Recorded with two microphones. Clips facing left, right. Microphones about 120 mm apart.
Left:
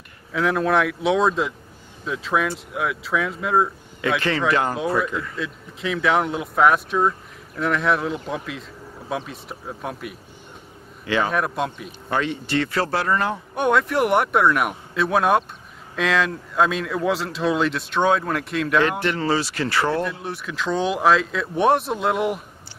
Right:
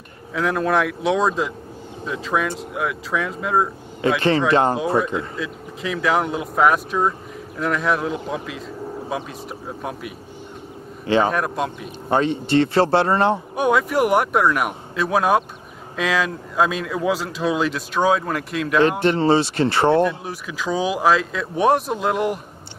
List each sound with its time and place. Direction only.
0.3 s speech: centre (ahead or behind)
4.2 s speech: 25° right (ahead or behind)
5.3 s speech: centre (ahead or behind)
11.1 s speech: 30° right (ahead or behind)
11.3 s speech: centre (ahead or behind)
12.1 s speech: 30° right (ahead or behind)
13.6 s speech: 5° right (ahead or behind)
18.8 s speech: 25° right (ahead or behind)
20.0 s speech: centre (ahead or behind)